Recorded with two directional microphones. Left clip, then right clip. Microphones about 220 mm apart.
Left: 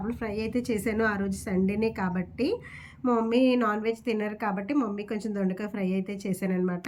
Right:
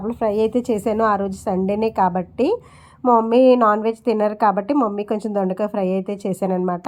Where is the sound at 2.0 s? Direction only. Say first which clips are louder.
Right 11 dB; 50° right (ahead or behind).